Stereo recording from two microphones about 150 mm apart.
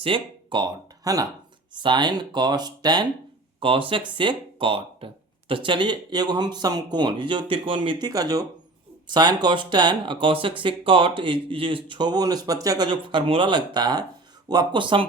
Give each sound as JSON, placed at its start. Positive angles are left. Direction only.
{"t": 0.0, "sound": "speech", "side_deg": -35}
{"t": 12.9, "sound": "speech", "side_deg": -35}